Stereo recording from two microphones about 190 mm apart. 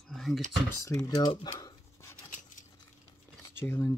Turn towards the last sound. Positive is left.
turn(degrees=10)  # may be behind; listen again after turning